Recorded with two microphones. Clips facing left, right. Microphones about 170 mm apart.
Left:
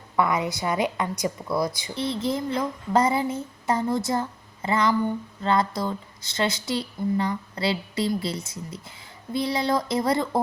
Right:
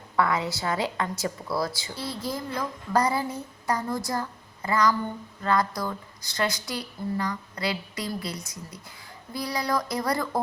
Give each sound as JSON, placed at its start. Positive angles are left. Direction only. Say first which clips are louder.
{"t": 0.2, "sound": "a woman's voice", "louder": "left 2 dB", "side_deg": 20}